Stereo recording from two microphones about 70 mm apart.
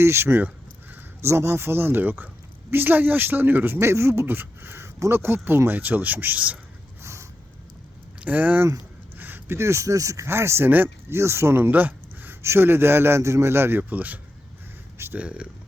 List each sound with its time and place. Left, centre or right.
0.0 s keys jangling: right
1.2 s a woman's voice: right
7.0 s a sound: right
8.2 s speech: right
11.2 s a woman's voice: right
14.9 s a sound: right
15.2 s speech: centre